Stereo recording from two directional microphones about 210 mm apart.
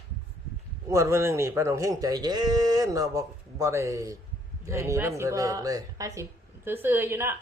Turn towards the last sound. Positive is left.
turn(degrees=-10)  # may be behind; listen again after turning